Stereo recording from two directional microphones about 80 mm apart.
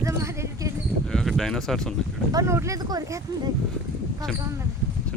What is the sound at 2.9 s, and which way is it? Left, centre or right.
Speech, right.